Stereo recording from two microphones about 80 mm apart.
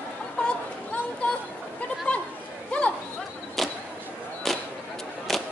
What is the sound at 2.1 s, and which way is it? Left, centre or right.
Chatter, centre.